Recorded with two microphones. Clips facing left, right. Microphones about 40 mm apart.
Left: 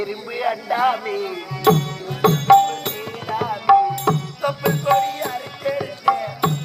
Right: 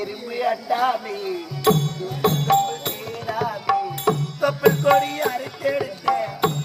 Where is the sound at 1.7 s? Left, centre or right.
Left.